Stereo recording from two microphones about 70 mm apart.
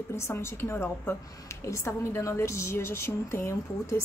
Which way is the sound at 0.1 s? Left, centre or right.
Left.